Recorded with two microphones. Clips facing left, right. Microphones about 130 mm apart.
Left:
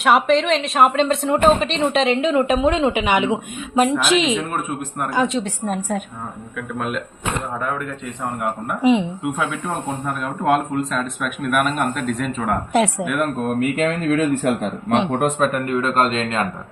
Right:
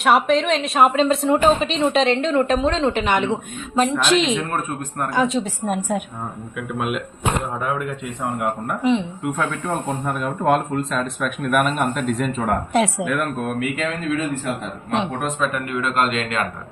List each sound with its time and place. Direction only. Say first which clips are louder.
0.0 s a woman's voice: left 1 dB; centre (ahead or behind)
8.9 s speech: left 3 dB; 15° left (ahead or behind)
10.1 s a woman's voice: even; centre (ahead or behind)
13.6 s a man's voice: left 4 dB; 50° left (ahead or behind); by 16.4 s 30° left (ahead or behind)